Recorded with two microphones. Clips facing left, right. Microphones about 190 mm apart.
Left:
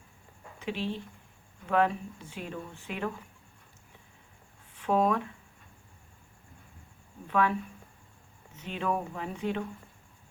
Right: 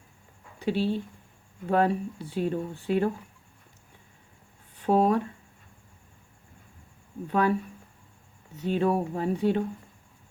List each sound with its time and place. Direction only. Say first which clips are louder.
0.6 s speech: right 7 dB; 35° right (ahead or behind)
4.8 s speech: right 4 dB; 35° right (ahead or behind)
7.3 s speech: right 3 dB; 40° right (ahead or behind)
8.5 s speech: right 7 dB; 40° right (ahead or behind)